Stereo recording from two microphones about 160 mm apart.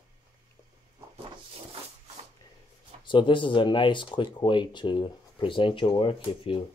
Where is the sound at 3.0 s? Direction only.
30° left (ahead or behind).